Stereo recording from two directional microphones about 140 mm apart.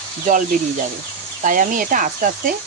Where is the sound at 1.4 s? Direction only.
70° right (ahead or behind).